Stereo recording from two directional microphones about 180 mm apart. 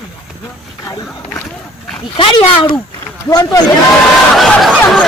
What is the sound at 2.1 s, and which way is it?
Speech, 25° left (ahead or behind).